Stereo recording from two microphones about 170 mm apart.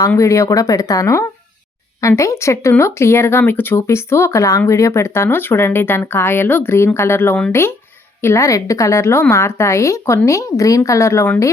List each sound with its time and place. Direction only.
0.1 s speech: 20° left (ahead or behind)